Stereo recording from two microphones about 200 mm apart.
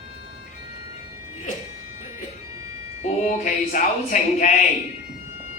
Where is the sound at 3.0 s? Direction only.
35° left (ahead or behind).